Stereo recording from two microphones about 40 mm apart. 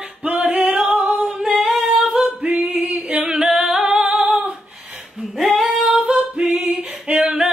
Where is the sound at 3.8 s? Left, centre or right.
Right.